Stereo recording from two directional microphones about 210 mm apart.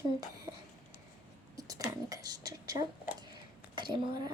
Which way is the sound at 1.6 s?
15° right (ahead or behind).